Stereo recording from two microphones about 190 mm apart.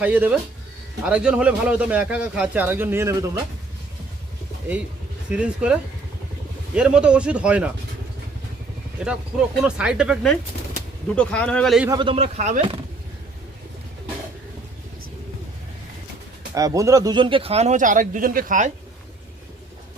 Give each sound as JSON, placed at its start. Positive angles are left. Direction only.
{"t": 0.0, "sound": "speech", "side_deg": -5}
{"t": 5.3, "sound": "speech", "side_deg": -5}
{"t": 6.7, "sound": "speech", "side_deg": -5}
{"t": 9.0, "sound": "speech", "side_deg": -5}
{"t": 11.9, "sound": "speech", "side_deg": -25}
{"t": 16.6, "sound": "speech", "side_deg": -20}